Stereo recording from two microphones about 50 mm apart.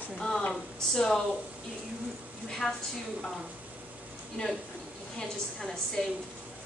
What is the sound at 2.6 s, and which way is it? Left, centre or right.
Speech, centre.